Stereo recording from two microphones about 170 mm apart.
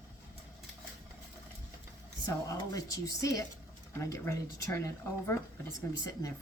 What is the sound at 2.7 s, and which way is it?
Speech, 20° left (ahead or behind).